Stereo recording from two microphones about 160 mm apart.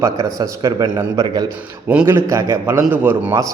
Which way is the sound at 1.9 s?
10° right (ahead or behind).